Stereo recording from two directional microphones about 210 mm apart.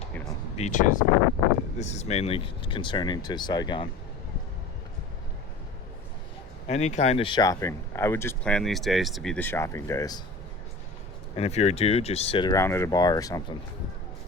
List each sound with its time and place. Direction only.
0.5 s speech: 35° left (ahead or behind)
6.7 s speech: 30° left (ahead or behind); by 10.2 s 15° left (ahead or behind)
11.3 s speech: 30° left (ahead or behind)